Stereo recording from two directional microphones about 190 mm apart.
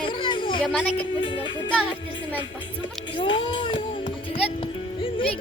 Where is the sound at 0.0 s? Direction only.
25° left (ahead or behind).